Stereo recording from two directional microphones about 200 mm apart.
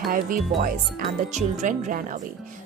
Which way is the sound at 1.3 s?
35° right (ahead or behind).